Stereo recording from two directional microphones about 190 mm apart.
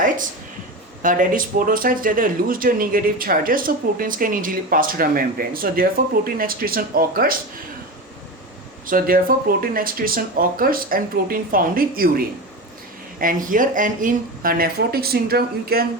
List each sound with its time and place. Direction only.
1.0 s speech: 45° right (ahead or behind)
8.9 s speech: 50° right (ahead or behind)